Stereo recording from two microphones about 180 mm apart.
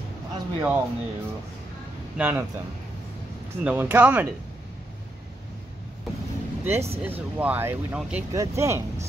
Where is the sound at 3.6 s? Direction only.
10° right (ahead or behind).